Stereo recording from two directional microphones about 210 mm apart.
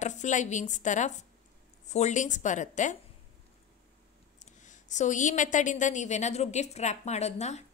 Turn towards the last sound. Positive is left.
turn(degrees=30)  # may be behind; listen again after turning